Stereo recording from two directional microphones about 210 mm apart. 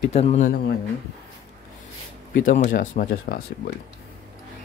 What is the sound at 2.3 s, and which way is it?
Speech, 40° left (ahead or behind).